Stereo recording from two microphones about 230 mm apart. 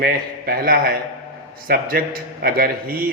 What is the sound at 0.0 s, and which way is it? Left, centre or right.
A man's voice, right.